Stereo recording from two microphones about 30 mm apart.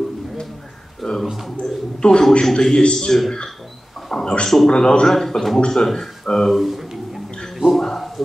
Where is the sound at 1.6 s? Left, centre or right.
Left.